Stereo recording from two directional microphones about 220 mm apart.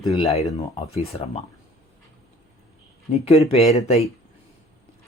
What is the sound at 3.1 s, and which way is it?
Speech, 30° left (ahead or behind).